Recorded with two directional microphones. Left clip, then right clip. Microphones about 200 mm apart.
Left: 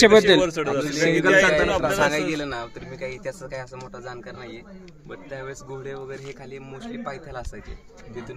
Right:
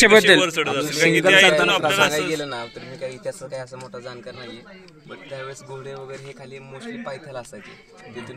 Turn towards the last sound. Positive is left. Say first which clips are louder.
# right 1 dB
turn(degrees=20)  # may be behind; listen again after turning